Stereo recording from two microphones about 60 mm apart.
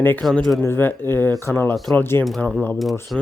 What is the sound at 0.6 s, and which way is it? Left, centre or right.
Speech, left.